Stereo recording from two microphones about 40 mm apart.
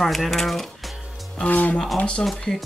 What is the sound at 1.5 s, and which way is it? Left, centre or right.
Speech, left.